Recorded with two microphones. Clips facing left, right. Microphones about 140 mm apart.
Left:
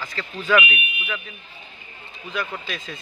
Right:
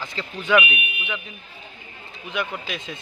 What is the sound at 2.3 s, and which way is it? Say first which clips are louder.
Speech: right 1 dB; 20° right (ahead or behind).